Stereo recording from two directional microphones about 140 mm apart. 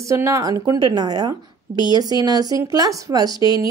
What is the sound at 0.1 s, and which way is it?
A woman's voice, 20° right (ahead or behind).